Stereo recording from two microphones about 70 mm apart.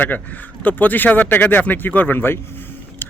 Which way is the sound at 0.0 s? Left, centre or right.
Left.